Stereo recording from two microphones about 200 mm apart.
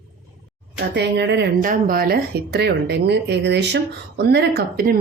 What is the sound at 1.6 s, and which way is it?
A woman's voice, 45° right (ahead or behind).